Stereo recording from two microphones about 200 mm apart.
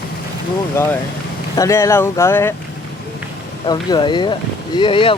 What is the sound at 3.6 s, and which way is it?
Speech, 20° left (ahead or behind).